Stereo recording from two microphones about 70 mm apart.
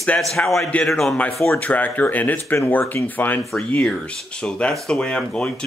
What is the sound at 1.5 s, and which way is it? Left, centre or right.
Speech, centre.